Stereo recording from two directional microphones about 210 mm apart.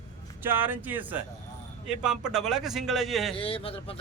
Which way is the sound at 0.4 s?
10° right (ahead or behind).